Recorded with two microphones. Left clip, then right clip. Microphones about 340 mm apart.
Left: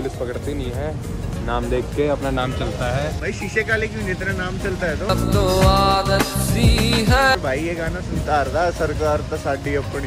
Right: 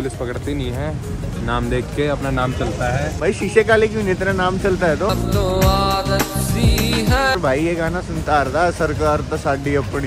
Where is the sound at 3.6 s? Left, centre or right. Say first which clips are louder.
Right 7 dB; centre.